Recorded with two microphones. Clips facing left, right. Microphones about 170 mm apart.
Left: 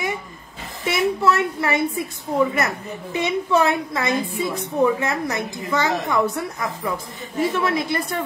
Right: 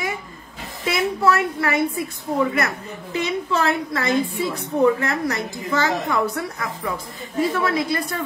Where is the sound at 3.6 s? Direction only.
15° left (ahead or behind).